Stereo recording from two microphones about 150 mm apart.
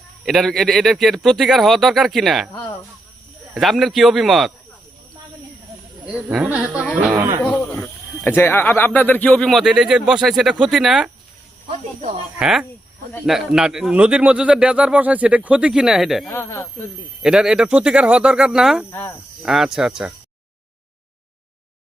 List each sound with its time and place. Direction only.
0.3 s speech: centre (ahead or behind)
2.5 s speech: 25° left (ahead or behind)
3.5 s speech: centre (ahead or behind)
6.1 s speech: 10° right (ahead or behind)
7.8 s speech: 10° left (ahead or behind); by 11.1 s 5° right (ahead or behind)
12.4 s speech: 5° right (ahead or behind)
16.3 s speech: 20° left (ahead or behind)
17.2 s speech: 5° right (ahead or behind)
18.9 s speech: 15° left (ahead or behind)
19.4 s speech: 5° right (ahead or behind)